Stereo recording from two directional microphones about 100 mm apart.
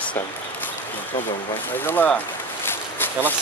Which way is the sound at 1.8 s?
20° left (ahead or behind).